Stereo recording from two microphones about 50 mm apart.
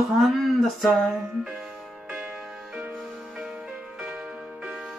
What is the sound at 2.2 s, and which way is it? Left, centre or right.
Music, centre.